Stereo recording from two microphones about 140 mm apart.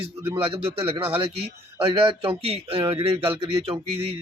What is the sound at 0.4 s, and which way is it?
A man's voice, 40° right (ahead or behind).